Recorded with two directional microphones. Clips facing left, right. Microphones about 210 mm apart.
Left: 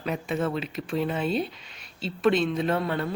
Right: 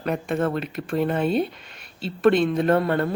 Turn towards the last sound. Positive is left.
turn(degrees=-55)  # may be behind; listen again after turning